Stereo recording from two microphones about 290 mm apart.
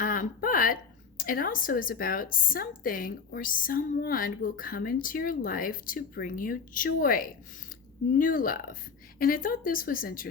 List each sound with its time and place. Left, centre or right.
0.0 s a woman's voice: left